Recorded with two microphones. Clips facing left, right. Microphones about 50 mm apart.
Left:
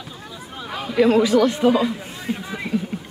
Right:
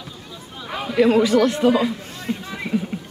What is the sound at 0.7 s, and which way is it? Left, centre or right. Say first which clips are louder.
A man's voice: even; centre.